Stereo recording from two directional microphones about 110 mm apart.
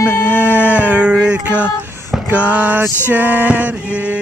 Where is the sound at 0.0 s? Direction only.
20° left (ahead or behind).